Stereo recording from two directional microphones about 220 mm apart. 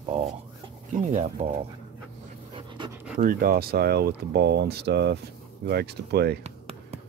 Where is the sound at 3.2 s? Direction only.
40° right (ahead or behind).